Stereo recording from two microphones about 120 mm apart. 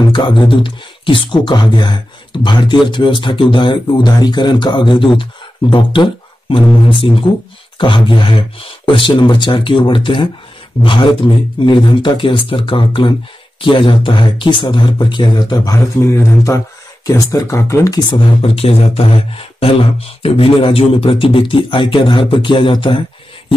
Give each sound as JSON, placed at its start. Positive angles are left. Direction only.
{"t": 0.1, "sound": "speech", "side_deg": 40}
{"t": 16.0, "sound": "speech", "side_deg": 20}
{"t": 18.4, "sound": "speech", "side_deg": 55}